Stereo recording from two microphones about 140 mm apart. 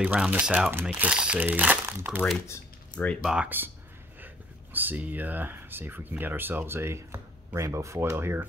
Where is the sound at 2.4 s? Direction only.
15° left (ahead or behind).